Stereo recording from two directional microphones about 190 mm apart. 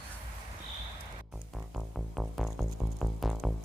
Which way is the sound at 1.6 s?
Centre (ahead or behind).